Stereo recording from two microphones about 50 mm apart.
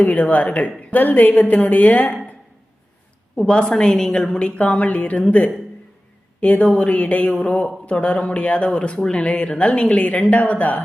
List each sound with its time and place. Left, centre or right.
0.0 s a woman's voice: left
3.3 s a woman's voice: centre